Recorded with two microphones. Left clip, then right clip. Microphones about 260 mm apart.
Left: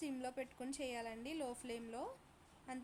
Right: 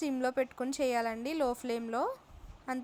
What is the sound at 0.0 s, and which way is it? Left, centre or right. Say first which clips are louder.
A woman's voice: right 13 dB; centre.